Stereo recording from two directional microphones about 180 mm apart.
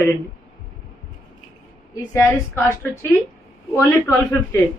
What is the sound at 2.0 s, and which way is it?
Speech, 15° left (ahead or behind).